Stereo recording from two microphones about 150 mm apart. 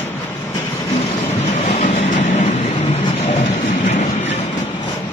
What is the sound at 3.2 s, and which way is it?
Train, 50° left (ahead or behind).